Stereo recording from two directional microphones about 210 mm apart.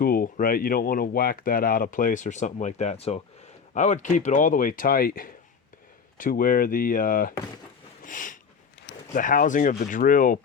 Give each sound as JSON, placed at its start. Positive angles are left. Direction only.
{"t": 0.0, "sound": "speech", "side_deg": 45}
{"t": 8.0, "sound": "a sound", "side_deg": 40}
{"t": 9.1, "sound": "speech", "side_deg": 40}